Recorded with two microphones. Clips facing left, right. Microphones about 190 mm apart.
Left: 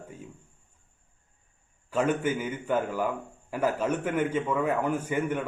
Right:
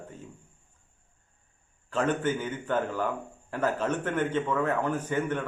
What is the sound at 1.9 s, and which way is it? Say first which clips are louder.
A man's voice: left 1 dB; 10° left (ahead or behind).